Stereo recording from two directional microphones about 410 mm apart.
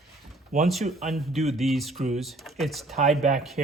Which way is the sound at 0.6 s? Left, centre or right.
Centre.